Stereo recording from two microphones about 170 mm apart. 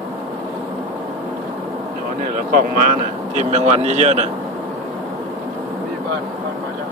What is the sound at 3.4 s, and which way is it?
Speech, 40° right (ahead or behind).